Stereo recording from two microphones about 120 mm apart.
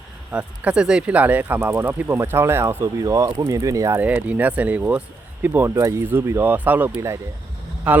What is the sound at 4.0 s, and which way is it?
Speech, 10° right (ahead or behind).